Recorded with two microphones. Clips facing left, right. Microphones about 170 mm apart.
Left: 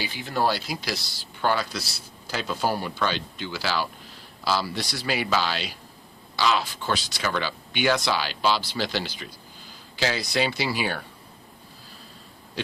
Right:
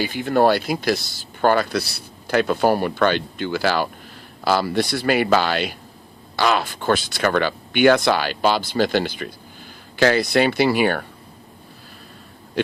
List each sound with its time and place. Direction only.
0.0 s speech: 55° right (ahead or behind)
12.6 s oink: 55° right (ahead or behind)